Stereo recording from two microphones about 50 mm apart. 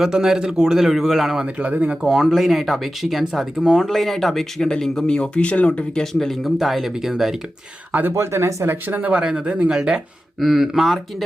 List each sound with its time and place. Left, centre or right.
0.0 s a man's voice: centre
1.5 s speech: right
1.9 s speech: centre; by 5.8 s left
5.9 s speech: centre
6.4 s speech: centre
8.1 s speech: right
8.7 s speech: right
9.0 s speech: right
10.4 s speech: centre